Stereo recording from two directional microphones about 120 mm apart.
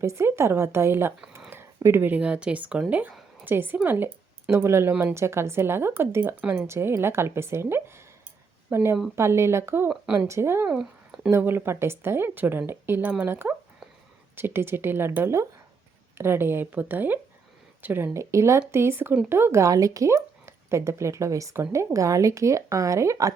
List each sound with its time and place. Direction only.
0.0 s speech: 25° right (ahead or behind)
10.7 s a sound: 5° right (ahead or behind)
11.3 s speech: 20° right (ahead or behind)